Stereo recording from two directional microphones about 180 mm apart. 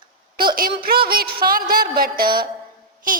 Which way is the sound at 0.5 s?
55° right (ahead or behind).